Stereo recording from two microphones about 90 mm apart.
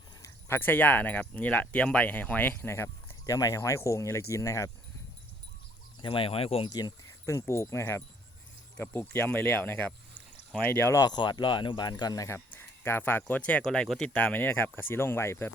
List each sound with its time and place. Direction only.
0.2 s speech: 30° left (ahead or behind)
6.0 s speech: 70° left (ahead or behind); by 6.7 s 90° left
6.7 s speech: 45° left (ahead or behind)
7.3 s speech: 35° left (ahead or behind)
11.0 s speech: 55° left (ahead or behind)
12.5 s speech: 25° left (ahead or behind)